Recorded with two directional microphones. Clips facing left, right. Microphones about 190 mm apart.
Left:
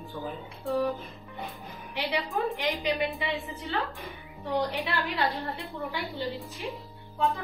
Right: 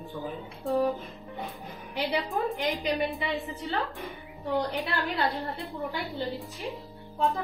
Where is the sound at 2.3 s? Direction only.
Centre (ahead or behind).